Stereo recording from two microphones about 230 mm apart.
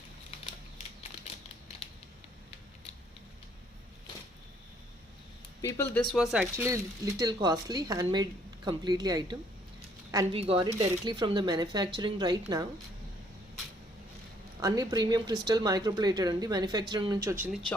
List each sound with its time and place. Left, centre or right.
5.6 s speech: centre
14.6 s speech: centre
17.4 s speech: centre